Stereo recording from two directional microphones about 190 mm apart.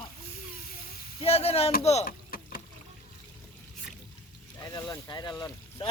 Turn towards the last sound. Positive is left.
turn(degrees=20)  # may be behind; listen again after turning